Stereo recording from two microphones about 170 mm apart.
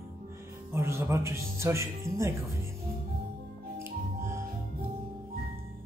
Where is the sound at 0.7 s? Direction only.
15° right (ahead or behind).